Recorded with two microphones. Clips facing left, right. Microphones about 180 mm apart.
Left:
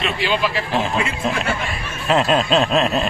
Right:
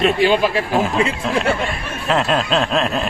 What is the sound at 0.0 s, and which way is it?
Speech, 45° right (ahead or behind).